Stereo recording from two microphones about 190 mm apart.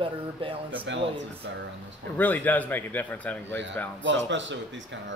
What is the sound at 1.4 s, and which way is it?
Speech, 70° right (ahead or behind).